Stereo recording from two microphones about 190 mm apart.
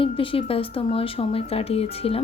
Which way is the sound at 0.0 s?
30° left (ahead or behind).